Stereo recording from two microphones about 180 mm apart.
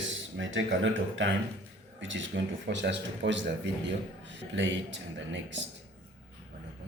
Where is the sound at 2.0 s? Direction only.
90° right.